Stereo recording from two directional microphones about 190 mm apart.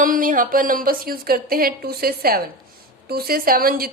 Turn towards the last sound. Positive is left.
turn(degrees=-50)  # may be behind; listen again after turning